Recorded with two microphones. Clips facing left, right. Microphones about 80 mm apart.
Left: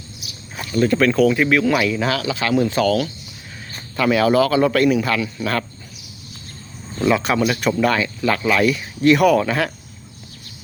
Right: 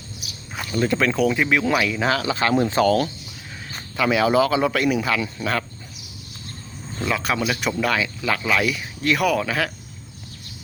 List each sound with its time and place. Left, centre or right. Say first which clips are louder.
0.7 s a man's voice: left 4 dB; centre
2.2 s speech: left 1 dB; right
3.9 s a man's voice: left 2 dB; centre
7.0 s speech: left 6 dB; centre